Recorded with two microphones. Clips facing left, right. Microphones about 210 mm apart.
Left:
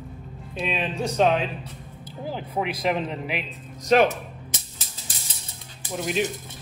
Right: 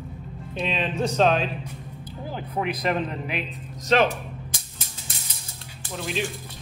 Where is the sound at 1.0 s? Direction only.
15° left (ahead or behind).